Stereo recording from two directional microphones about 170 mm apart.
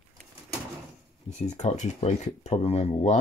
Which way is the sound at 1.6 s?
45° left (ahead or behind).